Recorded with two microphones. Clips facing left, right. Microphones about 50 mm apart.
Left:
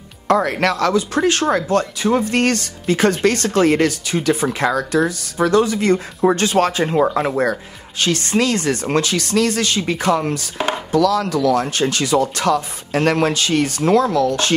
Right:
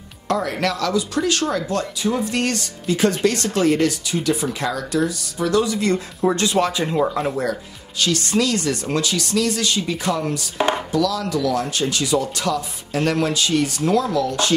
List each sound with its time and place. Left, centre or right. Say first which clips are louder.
0.3 s speech: left 5 dB; left
8.0 s speech: left 2 dB; left